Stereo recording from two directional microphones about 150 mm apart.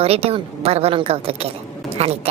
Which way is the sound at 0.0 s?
40° right (ahead or behind).